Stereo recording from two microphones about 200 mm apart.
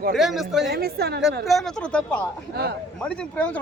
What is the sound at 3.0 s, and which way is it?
Speech, 5° left (ahead or behind).